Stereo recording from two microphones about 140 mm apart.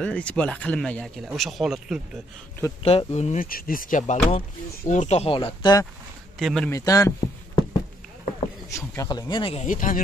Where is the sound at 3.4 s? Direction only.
85° left; by 5.3 s 50° left (ahead or behind).